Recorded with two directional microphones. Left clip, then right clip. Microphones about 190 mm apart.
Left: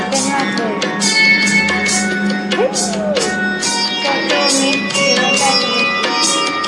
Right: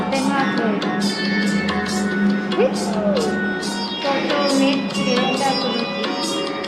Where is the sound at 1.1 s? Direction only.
40° left (ahead or behind).